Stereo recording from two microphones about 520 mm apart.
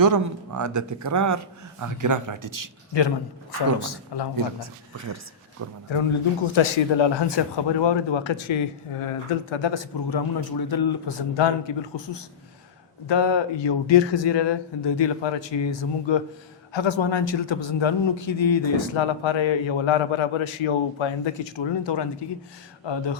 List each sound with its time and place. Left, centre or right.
0.0 s speech: right
2.9 s speech: left
4.4 s speech: right
6.6 s a man's voice: left
13.1 s a man's voice: left